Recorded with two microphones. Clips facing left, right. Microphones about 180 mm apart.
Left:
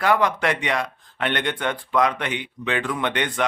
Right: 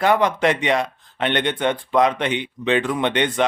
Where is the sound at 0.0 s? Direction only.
20° right (ahead or behind).